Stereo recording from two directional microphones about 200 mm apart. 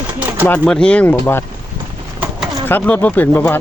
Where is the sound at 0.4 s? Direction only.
5° left (ahead or behind).